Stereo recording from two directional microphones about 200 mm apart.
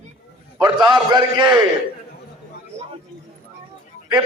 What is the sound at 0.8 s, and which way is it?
Speech, 5° right (ahead or behind).